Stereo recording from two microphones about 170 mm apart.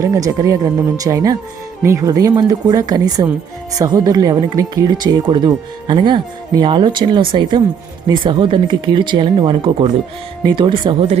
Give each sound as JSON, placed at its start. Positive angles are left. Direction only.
{"t": 0.0, "sound": "speech", "side_deg": -20}